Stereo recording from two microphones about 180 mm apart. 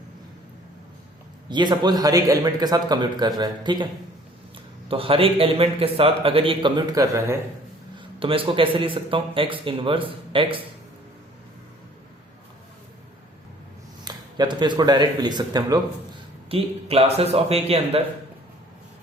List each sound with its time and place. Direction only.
1.5 s a man's voice: 25° right (ahead or behind)
4.9 s a man's voice: 30° right (ahead or behind)
7.9 s a man's voice: 30° right (ahead or behind)
14.0 s a man's voice: 25° right (ahead or behind)